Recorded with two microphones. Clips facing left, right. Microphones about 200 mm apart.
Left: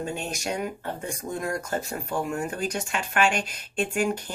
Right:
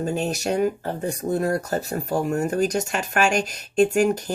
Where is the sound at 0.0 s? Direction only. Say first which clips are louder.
Right 7 dB; 40° right (ahead or behind).